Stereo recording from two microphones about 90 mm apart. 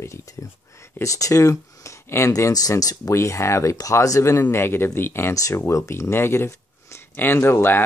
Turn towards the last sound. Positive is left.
turn(degrees=25)  # may be behind; listen again after turning